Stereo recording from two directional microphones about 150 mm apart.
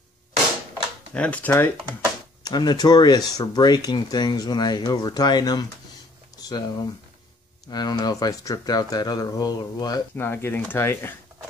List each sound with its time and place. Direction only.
1.1 s speech: 10° left (ahead or behind)
2.4 s speech: 30° left (ahead or behind)
10.1 s speech: 15° left (ahead or behind)